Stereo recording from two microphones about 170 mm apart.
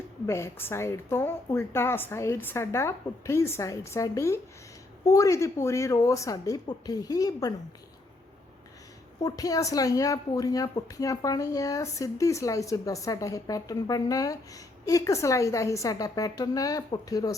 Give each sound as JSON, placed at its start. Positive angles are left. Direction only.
{"t": 0.3, "sound": "a woman's voice", "side_deg": 15}
{"t": 9.2, "sound": "speech", "side_deg": 20}